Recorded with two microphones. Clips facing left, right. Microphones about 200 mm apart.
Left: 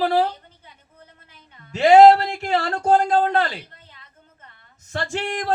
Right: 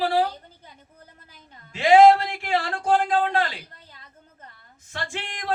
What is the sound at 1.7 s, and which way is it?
Speech, 45° left (ahead or behind).